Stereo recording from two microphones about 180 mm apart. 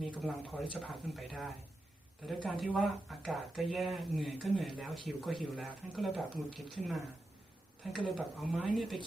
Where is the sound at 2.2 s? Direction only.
Centre (ahead or behind).